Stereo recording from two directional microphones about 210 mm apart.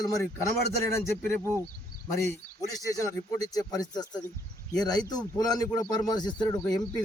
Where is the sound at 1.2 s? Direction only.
10° left (ahead or behind).